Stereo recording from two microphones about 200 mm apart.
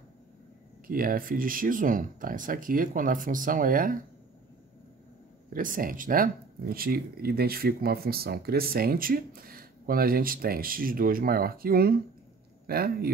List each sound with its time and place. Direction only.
0.8 s speech: 45° right (ahead or behind)
5.5 s speech: 45° right (ahead or behind)